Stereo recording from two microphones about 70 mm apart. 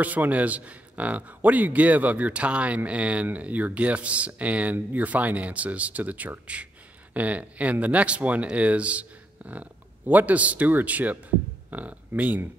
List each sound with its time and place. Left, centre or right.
0.0 s a man's voice: right